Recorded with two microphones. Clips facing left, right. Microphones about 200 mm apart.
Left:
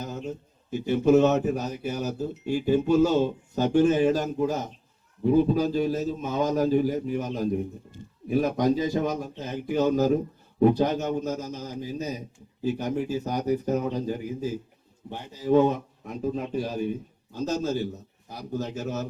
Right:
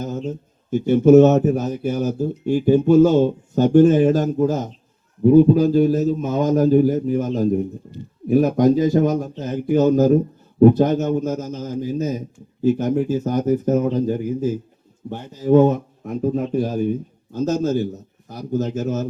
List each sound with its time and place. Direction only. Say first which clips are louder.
0.7 s speech: right 8 dB; 45° right (ahead or behind)